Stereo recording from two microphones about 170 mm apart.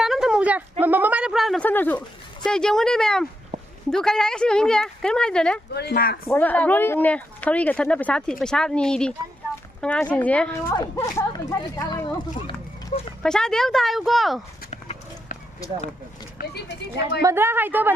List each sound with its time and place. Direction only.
0.0 s a sound: centre (ahead or behind)
3.5 s a sound: 40° right (ahead or behind)
3.9 s a woman's voice: 5° left (ahead or behind)
5.7 s speech: 70° left (ahead or behind)
6.2 s speech: 10° left (ahead or behind)
12.9 s speech: 45° left (ahead or behind)
13.2 s a woman's voice: 5° left (ahead or behind)
14.7 s horse: 40° left (ahead or behind)
16.4 s speech: 75° left (ahead or behind)
17.2 s speech: 15° right (ahead or behind)